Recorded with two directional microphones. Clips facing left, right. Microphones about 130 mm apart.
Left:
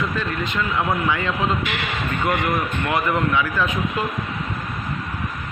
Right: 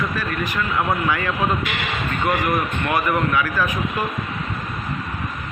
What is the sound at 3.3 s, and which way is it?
Speech, 20° left (ahead or behind).